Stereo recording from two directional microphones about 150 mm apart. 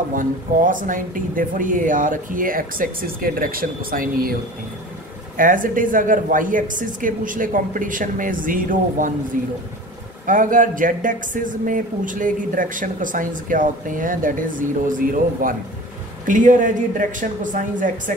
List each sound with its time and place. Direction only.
0.1 s speech: 65° right (ahead or behind)
5.4 s speech: 65° right (ahead or behind)